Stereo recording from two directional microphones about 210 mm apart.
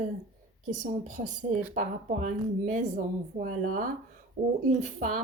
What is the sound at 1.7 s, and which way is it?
Speech, 35° right (ahead or behind).